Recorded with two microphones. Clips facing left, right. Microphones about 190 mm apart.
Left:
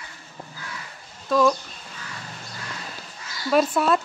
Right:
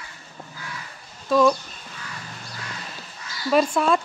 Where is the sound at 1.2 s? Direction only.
Centre (ahead or behind).